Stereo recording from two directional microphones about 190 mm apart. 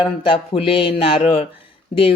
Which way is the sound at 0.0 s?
30° left (ahead or behind).